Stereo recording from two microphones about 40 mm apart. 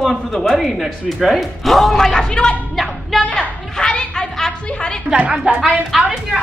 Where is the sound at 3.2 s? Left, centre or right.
Left.